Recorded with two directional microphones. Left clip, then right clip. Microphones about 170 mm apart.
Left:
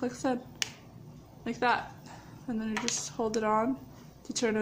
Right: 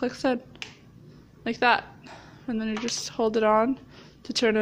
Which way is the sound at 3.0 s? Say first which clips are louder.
Right 12 dB; 25° right (ahead or behind).